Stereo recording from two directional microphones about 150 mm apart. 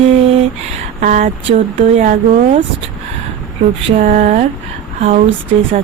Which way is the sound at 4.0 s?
60° right (ahead or behind).